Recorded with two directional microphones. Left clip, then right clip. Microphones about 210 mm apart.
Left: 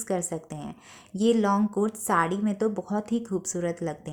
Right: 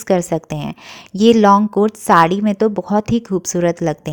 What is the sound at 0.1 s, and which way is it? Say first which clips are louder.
A woman's voice: right 14 dB; 35° right (ahead or behind).